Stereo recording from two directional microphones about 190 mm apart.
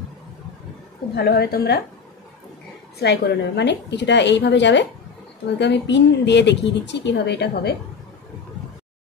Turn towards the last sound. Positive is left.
turn(degrees=60)  # may be behind; listen again after turning